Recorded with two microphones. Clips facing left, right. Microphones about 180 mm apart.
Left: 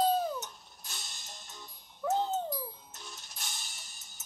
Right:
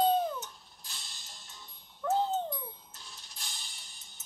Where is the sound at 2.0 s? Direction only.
5° left (ahead or behind).